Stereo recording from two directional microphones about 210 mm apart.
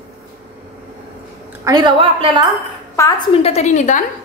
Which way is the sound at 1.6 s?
20° right (ahead or behind).